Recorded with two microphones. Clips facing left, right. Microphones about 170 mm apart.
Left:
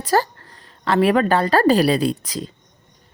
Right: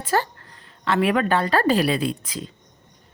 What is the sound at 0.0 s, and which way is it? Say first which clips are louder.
A woman's voice: left 4 dB; 40° left (ahead or behind).